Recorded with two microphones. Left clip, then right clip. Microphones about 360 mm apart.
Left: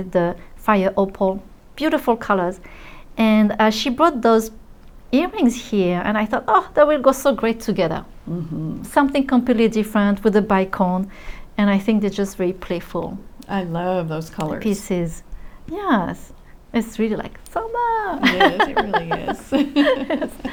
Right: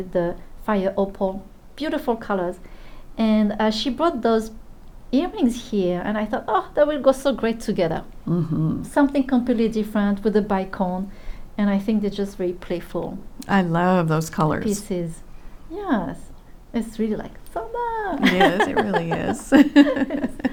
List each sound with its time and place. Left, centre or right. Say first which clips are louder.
0.1 s a woman's voice: left 4 dB; left
8.3 s speech: right 6 dB; right
8.8 s a woman's voice: left 3 dB; left
13.4 s speech: right 4 dB; right
14.6 s a woman's voice: left 3 dB; left
19.4 s speech: right 8 dB; right